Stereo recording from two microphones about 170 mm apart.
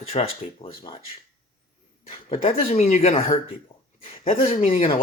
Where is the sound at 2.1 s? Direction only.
35° left (ahead or behind).